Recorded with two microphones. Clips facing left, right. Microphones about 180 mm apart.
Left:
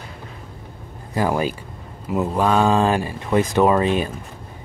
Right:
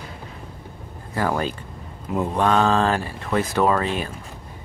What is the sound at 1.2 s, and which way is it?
Speech, 15° left (ahead or behind).